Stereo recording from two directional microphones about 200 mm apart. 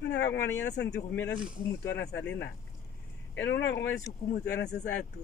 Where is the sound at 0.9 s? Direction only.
60° left (ahead or behind).